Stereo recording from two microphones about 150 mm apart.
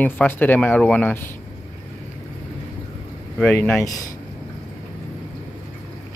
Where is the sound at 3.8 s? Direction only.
25° left (ahead or behind).